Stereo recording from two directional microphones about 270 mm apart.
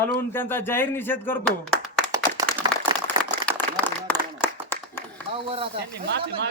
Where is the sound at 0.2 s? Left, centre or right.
Centre.